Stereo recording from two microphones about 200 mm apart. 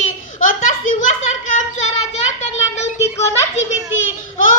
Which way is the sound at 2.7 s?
35° left (ahead or behind).